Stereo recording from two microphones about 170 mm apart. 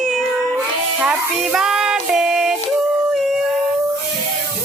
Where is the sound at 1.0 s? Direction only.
5° right (ahead or behind).